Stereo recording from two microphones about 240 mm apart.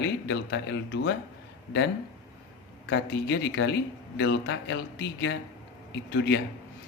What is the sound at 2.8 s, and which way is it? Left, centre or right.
Speech, left.